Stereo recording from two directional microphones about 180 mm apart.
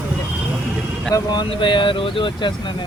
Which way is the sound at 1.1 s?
25° left (ahead or behind).